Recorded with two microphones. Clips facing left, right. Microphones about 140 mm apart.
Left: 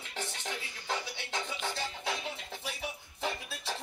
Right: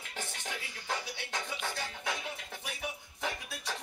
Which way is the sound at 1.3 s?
50° right (ahead or behind).